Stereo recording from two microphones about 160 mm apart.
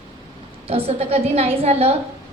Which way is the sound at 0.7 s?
40° right (ahead or behind).